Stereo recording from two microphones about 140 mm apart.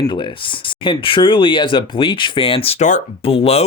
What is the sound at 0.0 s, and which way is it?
Speech, 35° left (ahead or behind).